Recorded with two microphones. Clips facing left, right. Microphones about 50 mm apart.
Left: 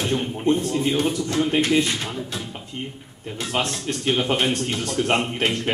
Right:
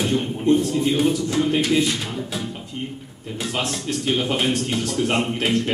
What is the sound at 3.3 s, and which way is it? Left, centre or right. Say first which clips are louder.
A man's voice: even; centre.